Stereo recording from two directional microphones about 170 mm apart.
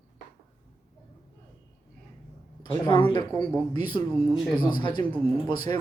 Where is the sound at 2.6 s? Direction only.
25° left (ahead or behind).